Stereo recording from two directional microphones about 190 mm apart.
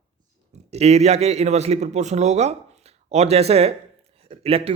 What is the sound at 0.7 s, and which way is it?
Speech, 35° right (ahead or behind).